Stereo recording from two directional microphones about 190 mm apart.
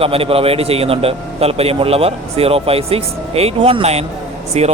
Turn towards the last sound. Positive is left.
turn(degrees=-35)  # may be behind; listen again after turning